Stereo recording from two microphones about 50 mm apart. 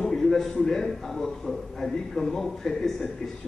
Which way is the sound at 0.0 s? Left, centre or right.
Centre.